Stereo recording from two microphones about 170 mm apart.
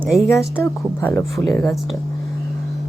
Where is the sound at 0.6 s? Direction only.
15° left (ahead or behind).